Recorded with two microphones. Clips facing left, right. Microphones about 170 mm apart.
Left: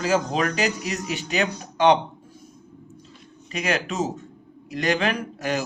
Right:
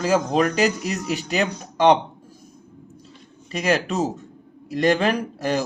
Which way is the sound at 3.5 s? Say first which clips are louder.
Right 4 dB; 40° right (ahead or behind).